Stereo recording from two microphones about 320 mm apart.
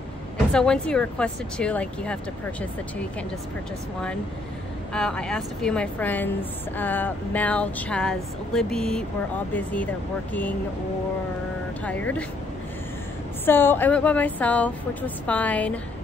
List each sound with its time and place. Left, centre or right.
0.5 s a woman's voice: centre
4.9 s a woman's voice: centre
11.8 s a woman's voice: centre
13.5 s a woman's voice: centre